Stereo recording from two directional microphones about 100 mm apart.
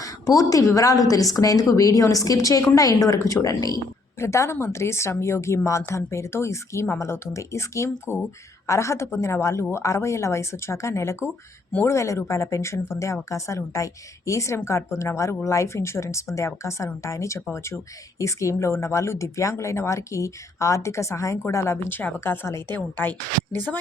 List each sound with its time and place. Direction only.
0.0 s a woman's voice: 35° left (ahead or behind); by 23.7 s 20° left (ahead or behind)